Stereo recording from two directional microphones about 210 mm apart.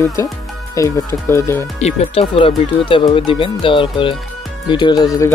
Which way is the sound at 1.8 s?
30° left (ahead or behind).